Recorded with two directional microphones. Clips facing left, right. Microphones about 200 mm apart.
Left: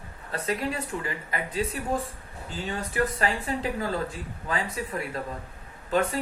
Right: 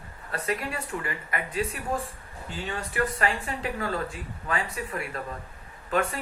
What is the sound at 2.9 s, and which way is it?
Speech, 35° left (ahead or behind).